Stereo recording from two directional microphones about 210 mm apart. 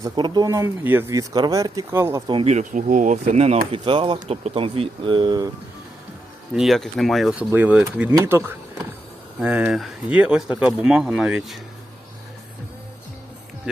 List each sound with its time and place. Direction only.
0.0 s speech: 20° right (ahead or behind)
6.5 s speech: centre (ahead or behind)